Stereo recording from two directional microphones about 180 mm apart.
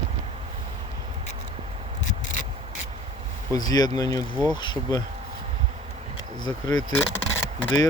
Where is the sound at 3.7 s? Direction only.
20° left (ahead or behind).